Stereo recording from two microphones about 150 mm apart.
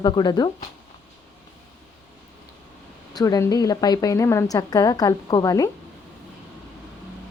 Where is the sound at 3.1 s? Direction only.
25° left (ahead or behind).